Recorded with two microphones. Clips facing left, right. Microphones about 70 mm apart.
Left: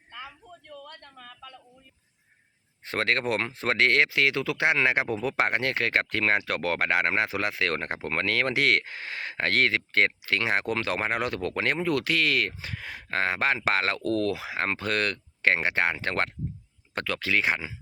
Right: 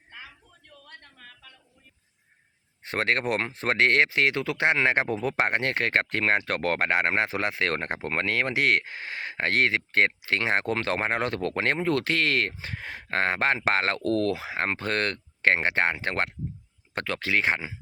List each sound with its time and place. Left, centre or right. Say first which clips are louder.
2.8 s speech: right 1 dB; right